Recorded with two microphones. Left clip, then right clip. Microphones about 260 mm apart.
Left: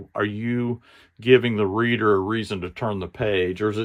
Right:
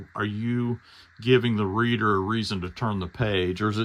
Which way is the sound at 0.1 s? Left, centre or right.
Centre.